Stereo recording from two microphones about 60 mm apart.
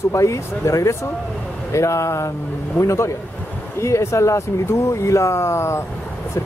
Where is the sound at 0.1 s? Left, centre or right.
Left.